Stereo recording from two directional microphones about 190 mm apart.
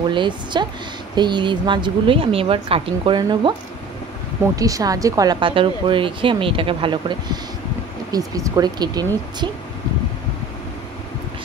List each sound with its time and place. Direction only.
0.1 s speech: 25° right (ahead or behind)
4.6 s speech: 20° right (ahead or behind)